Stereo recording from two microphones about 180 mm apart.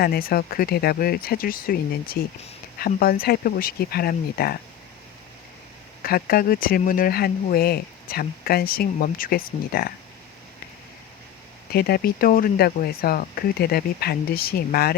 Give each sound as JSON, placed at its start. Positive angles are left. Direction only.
{"t": 0.0, "sound": "speech", "side_deg": 55}
{"t": 6.0, "sound": "speech", "side_deg": 55}
{"t": 11.7, "sound": "speech", "side_deg": 60}